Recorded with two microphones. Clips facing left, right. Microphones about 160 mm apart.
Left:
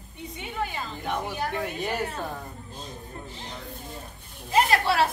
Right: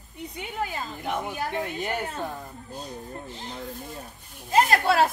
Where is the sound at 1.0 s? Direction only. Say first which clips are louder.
Even; 20° right (ahead or behind).